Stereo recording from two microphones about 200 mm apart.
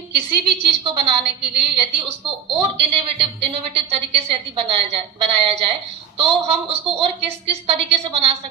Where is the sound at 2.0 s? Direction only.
30° right (ahead or behind).